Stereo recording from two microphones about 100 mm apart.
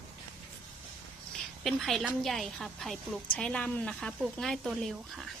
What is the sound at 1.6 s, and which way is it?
A woman's voice, centre (ahead or behind).